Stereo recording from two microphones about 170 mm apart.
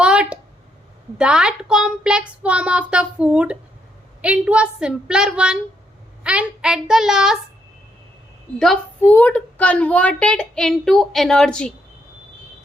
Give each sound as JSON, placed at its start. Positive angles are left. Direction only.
{"t": 0.0, "sound": "a sound", "side_deg": -5}
{"t": 1.2, "sound": "a woman's voice", "side_deg": -5}
{"t": 8.5, "sound": "a woman's voice", "side_deg": 5}